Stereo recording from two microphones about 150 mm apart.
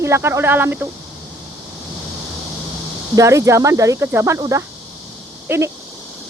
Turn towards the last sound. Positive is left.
turn(degrees=-15)  # may be behind; listen again after turning